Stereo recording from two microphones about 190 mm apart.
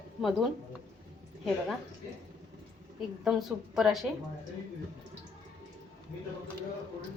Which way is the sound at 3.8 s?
Centre (ahead or behind).